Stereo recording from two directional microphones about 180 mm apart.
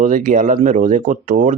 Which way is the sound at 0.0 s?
45° right (ahead or behind).